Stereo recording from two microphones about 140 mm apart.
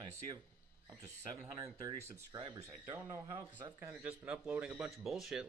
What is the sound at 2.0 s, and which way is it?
Speech, 20° right (ahead or behind).